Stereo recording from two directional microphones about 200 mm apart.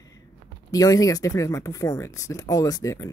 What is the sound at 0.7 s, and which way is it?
Speech, 15° left (ahead or behind).